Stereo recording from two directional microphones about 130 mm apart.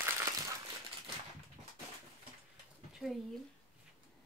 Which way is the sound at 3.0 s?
10° right (ahead or behind).